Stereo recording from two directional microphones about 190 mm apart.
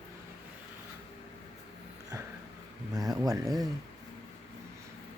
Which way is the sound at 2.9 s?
20° right (ahead or behind).